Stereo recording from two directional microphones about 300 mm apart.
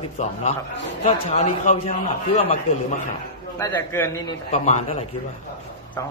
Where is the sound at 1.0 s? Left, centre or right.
Left.